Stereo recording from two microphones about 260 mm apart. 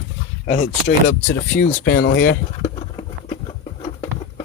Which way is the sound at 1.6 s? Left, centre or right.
Left.